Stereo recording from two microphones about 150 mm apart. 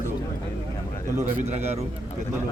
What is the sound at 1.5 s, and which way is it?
Speech, 45° right (ahead or behind).